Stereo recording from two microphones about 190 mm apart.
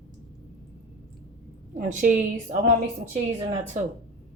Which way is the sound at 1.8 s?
45° right (ahead or behind).